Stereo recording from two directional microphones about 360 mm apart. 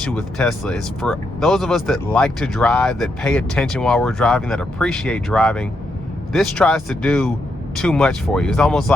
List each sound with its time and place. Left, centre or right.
0.0 s speech: centre